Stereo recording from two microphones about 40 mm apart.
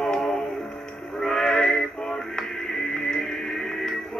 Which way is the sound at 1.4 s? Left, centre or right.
Centre.